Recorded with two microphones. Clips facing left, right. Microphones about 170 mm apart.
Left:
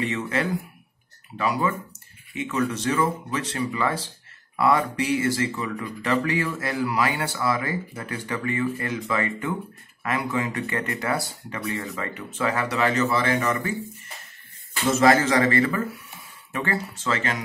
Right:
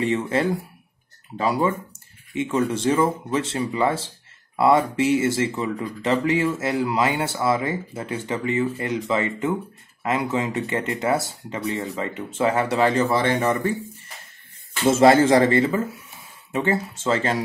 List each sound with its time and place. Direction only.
0.0 s speech: 30° right (ahead or behind)
14.9 s speech: 25° right (ahead or behind)